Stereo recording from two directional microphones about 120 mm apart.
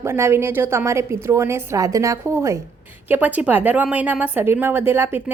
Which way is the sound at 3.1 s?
15° right (ahead or behind).